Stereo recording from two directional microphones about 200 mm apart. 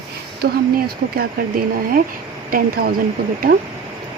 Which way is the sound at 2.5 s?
50° right (ahead or behind).